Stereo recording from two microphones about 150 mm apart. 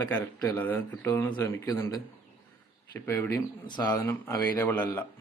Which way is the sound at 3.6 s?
30° left (ahead or behind).